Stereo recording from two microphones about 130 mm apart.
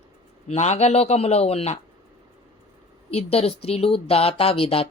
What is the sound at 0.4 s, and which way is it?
A man's voice, 60° left (ahead or behind).